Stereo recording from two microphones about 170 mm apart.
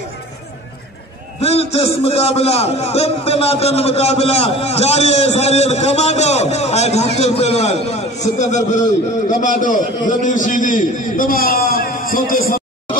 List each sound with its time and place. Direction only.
1.4 s a man's voice: 35° left (ahead or behind); by 12.5 s 55° left (ahead or behind)